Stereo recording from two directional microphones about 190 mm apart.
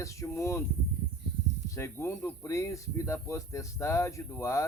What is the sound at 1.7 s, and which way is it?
Speech, 15° left (ahead or behind).